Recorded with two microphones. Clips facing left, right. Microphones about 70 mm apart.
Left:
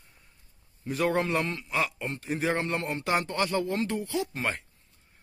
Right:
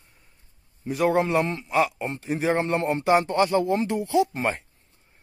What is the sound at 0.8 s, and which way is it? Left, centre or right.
A man's voice, centre.